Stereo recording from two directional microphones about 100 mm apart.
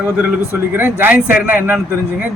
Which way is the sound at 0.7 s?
20° right (ahead or behind).